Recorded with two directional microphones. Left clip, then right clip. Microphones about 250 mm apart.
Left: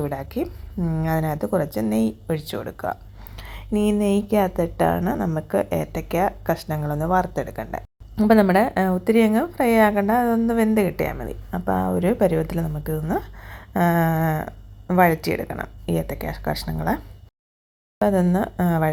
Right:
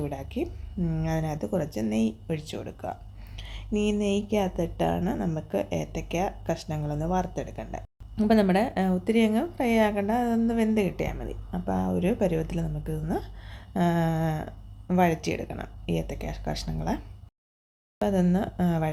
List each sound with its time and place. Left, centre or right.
0.0 s a woman's voice: centre
18.0 s a woman's voice: centre